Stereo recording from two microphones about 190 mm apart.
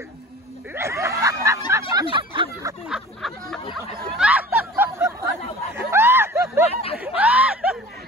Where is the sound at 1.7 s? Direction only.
15° right (ahead or behind).